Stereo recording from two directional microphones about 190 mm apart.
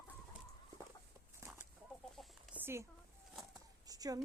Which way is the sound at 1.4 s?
5° right (ahead or behind).